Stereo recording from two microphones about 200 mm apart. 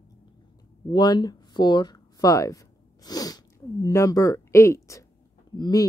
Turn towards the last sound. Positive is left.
turn(degrees=20)  # may be behind; listen again after turning